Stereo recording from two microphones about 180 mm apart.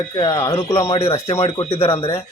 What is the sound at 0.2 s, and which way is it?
Speech, 20° left (ahead or behind).